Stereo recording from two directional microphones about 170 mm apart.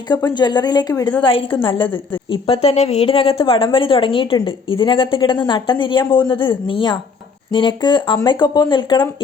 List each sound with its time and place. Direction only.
0.1 s a woman's voice: 25° left (ahead or behind)